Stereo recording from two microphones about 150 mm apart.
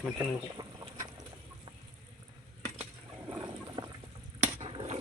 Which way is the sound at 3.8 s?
30° right (ahead or behind).